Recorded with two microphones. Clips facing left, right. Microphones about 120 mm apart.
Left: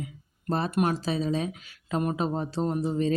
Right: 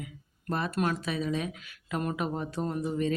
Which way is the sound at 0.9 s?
30° left (ahead or behind).